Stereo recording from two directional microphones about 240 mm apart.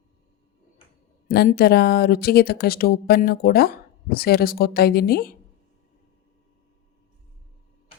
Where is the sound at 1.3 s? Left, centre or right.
Left.